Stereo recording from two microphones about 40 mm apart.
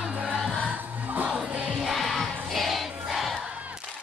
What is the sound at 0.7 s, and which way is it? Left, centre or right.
Music, right.